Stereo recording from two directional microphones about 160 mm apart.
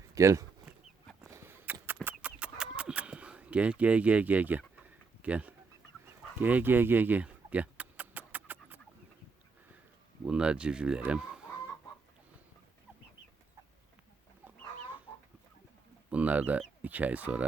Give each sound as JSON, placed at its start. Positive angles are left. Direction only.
{"t": 0.1, "sound": "speech", "side_deg": -20}
{"t": 1.3, "sound": "a sound", "side_deg": -15}
{"t": 2.0, "sound": "chicken", "side_deg": -10}
{"t": 5.2, "sound": "speech", "side_deg": -10}
{"t": 6.4, "sound": "a sound", "side_deg": -10}
{"t": 10.2, "sound": "speech", "side_deg": -5}
{"t": 16.0, "sound": "speech", "side_deg": -10}